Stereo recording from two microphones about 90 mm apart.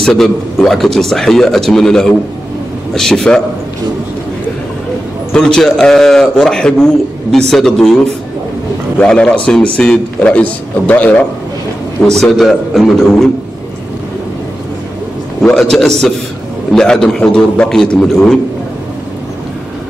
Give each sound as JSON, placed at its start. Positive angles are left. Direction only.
{"t": 0.0, "sound": "a man's voice", "side_deg": 5}
{"t": 5.3, "sound": "a man's voice", "side_deg": 5}
{"t": 8.9, "sound": "a man's voice", "side_deg": 15}
{"t": 12.1, "sound": "a man's voice", "side_deg": 5}
{"t": 15.5, "sound": "a man's voice", "side_deg": 5}